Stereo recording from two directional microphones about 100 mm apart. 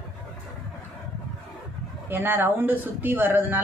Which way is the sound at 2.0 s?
20° right (ahead or behind).